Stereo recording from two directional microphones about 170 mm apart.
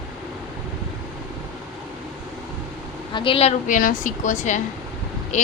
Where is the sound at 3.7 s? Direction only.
50° left (ahead or behind).